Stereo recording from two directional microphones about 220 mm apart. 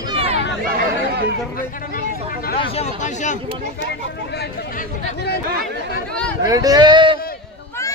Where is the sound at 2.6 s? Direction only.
30° left (ahead or behind).